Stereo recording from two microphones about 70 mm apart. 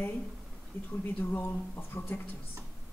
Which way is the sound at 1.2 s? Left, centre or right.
Left.